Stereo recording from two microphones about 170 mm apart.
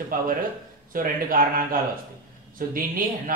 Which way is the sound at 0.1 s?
55° right (ahead or behind).